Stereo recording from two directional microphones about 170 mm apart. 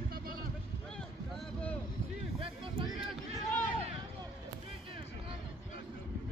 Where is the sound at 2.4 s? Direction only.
30° right (ahead or behind).